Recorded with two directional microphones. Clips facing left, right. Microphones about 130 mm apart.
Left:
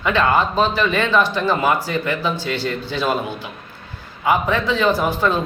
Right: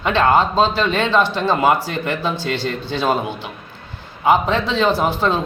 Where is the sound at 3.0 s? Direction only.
20° right (ahead or behind).